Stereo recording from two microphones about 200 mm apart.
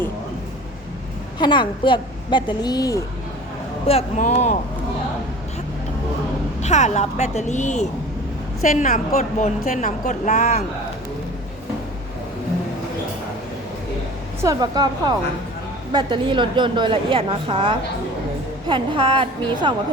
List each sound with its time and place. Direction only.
1.4 s a woman's voice: 20° left (ahead or behind)
3.8 s a woman's voice: 30° left (ahead or behind)
6.6 s a woman's voice: 35° left (ahead or behind)
14.4 s a woman's voice: 20° right (ahead or behind)